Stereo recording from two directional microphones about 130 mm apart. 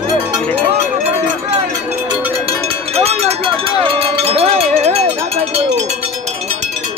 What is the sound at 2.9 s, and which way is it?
Cowbell, 55° right (ahead or behind).